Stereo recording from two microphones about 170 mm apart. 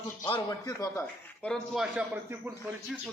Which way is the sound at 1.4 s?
Centre (ahead or behind).